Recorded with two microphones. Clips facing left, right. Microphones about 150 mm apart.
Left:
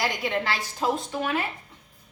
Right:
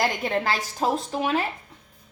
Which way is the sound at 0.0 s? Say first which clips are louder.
Right 3 dB; 45° right (ahead or behind).